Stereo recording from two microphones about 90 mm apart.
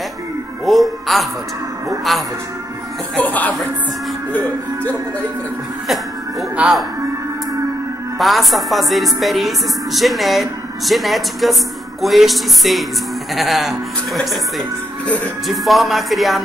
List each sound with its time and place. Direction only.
0.7 s music: centre (ahead or behind)
2.1 s speech: centre (ahead or behind)
3.3 s music: 20° left (ahead or behind)
6.5 s speech: 10° right (ahead or behind)
8.2 s speech: centre (ahead or behind)
15.4 s speech: centre (ahead or behind)